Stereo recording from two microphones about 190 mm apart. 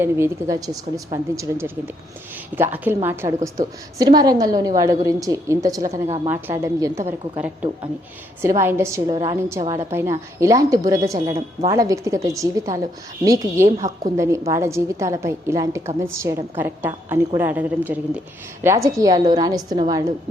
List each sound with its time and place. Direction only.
0.0 s a woman's voice: 15° right (ahead or behind)